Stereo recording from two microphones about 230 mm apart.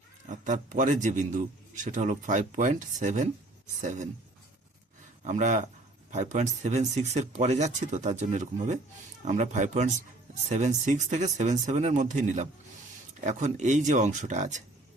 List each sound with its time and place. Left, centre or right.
0.3 s a man's voice: right
5.2 s a man's voice: right